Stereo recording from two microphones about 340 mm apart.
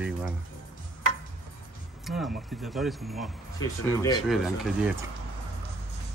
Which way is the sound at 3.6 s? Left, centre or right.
Centre.